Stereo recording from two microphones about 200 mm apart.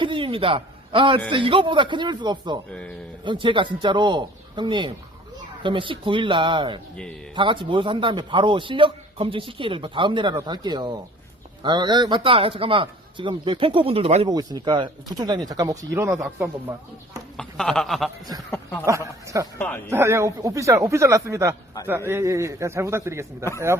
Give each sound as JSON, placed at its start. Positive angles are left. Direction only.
{"t": 0.0, "sound": "a man's voice", "side_deg": -25}
{"t": 2.6, "sound": "speech", "side_deg": 5}
{"t": 3.2, "sound": "a man's voice", "side_deg": -25}
{"t": 6.9, "sound": "speech", "side_deg": 5}
{"t": 7.3, "sound": "a man's voice", "side_deg": -25}
{"t": 17.3, "sound": "speech", "side_deg": 5}
{"t": 18.9, "sound": "speech", "side_deg": -15}
{"t": 19.5, "sound": "speech", "side_deg": 10}
{"t": 19.9, "sound": "speech", "side_deg": -15}